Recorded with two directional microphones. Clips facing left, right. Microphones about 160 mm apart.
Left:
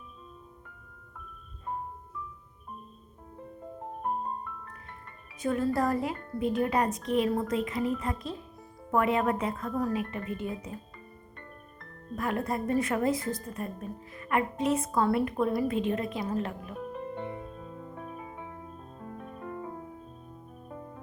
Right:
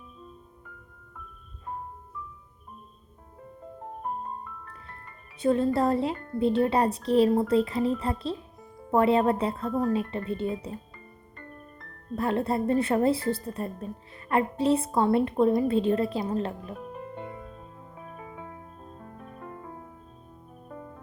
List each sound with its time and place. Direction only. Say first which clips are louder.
5.4 s speech: right 4 dB; 30° right (ahead or behind)
10.9 s music: even; centre (ahead or behind)
12.1 s speech: right 4 dB; 30° right (ahead or behind)